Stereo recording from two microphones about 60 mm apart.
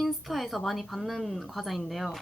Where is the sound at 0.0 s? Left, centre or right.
Centre.